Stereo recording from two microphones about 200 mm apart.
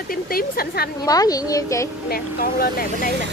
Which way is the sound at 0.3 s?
50° left (ahead or behind).